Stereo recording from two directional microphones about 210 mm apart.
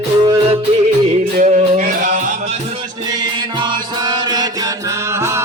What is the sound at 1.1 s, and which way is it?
Music, 35° right (ahead or behind).